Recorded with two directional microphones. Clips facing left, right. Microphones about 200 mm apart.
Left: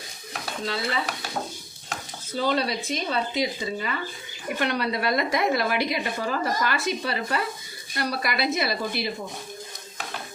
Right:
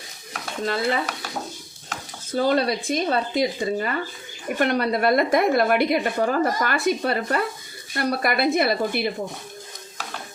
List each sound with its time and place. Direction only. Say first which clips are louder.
0.6 s a woman's voice: right 5 dB; 50° right (ahead or behind)
2.3 s a woman's voice: right 4 dB; 50° right (ahead or behind)